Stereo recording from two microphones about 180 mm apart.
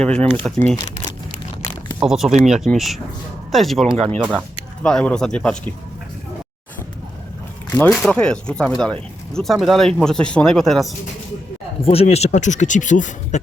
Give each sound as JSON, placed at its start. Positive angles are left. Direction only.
{"t": 0.0, "sound": "speech", "side_deg": 5}
{"t": 2.0, "sound": "speech", "side_deg": 0}
{"t": 7.7, "sound": "speech", "side_deg": 5}
{"t": 11.9, "sound": "speech", "side_deg": 35}